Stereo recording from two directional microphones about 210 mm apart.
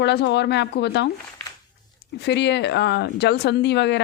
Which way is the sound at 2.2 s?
55° left (ahead or behind).